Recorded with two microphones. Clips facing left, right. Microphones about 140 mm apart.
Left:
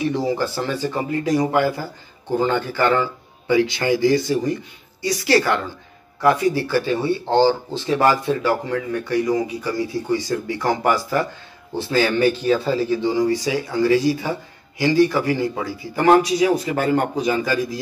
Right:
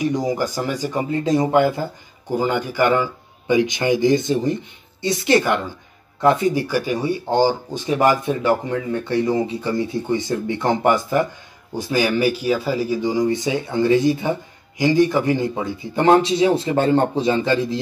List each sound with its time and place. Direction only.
0.0 s speech: 15° right (ahead or behind)
2.2 s speech: 10° right (ahead or behind); by 17.7 s 25° right (ahead or behind)